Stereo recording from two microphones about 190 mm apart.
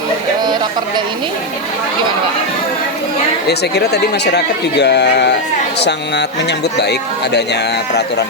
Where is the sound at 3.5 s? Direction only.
60° left (ahead or behind).